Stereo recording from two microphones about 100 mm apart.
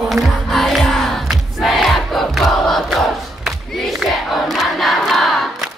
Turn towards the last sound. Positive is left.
turn(degrees=0)  # may be behind; listen again after turning